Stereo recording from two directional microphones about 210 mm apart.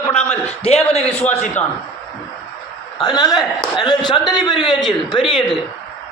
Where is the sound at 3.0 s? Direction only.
20° left (ahead or behind).